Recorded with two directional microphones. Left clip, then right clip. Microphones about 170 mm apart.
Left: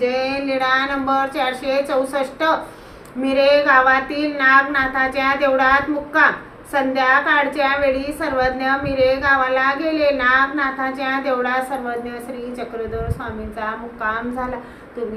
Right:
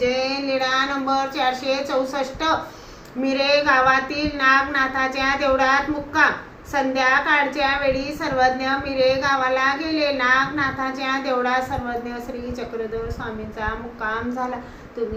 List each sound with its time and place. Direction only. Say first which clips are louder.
0.0 s a woman's voice: left 2 dB; 15° left (ahead or behind)
6.7 s a woman's voice: left 3 dB; 15° left (ahead or behind)
13.6 s a woman's voice: left 2 dB; 15° left (ahead or behind)